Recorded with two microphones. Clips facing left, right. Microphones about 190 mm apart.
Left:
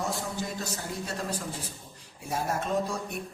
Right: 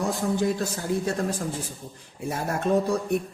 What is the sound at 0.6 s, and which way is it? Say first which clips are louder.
Speech: right 8 dB; 50° right (ahead or behind).